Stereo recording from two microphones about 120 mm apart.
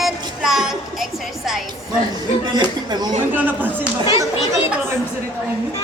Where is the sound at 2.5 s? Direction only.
35° right (ahead or behind).